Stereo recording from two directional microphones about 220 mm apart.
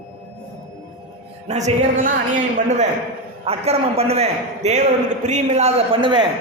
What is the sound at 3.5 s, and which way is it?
A man's voice, 25° right (ahead or behind).